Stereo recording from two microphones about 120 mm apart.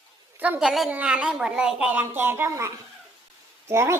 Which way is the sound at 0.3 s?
15° right (ahead or behind).